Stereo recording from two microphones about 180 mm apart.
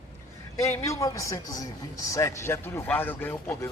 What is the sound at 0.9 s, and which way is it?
A man's voice, 15° left (ahead or behind).